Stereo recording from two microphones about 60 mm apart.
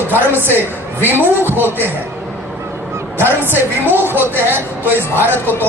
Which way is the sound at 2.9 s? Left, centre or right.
Right.